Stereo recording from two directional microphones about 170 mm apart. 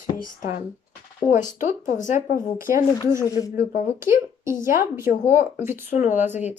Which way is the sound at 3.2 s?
20° left (ahead or behind).